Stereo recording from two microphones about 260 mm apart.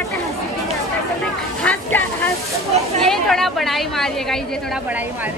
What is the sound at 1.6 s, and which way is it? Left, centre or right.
A woman's voice, centre.